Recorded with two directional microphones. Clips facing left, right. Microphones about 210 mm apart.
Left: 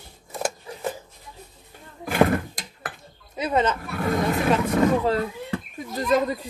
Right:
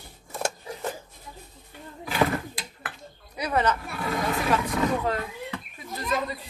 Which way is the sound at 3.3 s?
25° left (ahead or behind).